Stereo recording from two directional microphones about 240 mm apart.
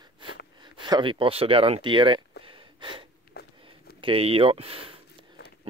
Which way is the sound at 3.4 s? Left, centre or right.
Left.